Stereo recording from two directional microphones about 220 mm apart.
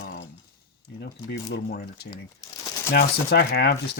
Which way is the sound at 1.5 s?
45° left (ahead or behind).